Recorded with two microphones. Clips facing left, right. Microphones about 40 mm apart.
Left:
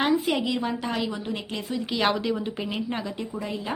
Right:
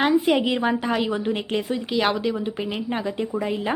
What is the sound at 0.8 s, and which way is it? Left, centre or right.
A woman's voice, centre.